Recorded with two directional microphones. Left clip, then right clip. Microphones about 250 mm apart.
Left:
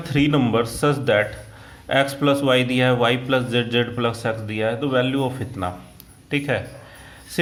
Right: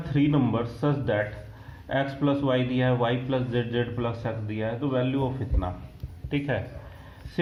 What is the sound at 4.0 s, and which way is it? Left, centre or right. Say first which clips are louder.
Speech: left 8 dB; left.